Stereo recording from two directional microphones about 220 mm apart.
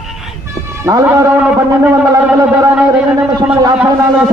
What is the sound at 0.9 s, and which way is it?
A man's voice, 15° right (ahead or behind).